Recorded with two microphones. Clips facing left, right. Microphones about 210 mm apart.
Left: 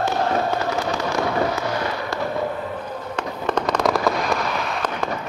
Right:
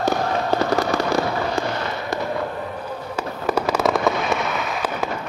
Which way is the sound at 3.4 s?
5° right (ahead or behind).